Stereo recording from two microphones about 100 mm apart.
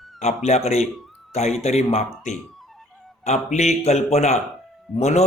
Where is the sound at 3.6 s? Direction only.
90° left.